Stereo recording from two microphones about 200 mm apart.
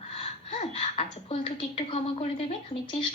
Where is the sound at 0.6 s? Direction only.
30° left (ahead or behind).